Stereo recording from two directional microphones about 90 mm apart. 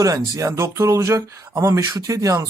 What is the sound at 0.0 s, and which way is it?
Speech, 40° right (ahead or behind).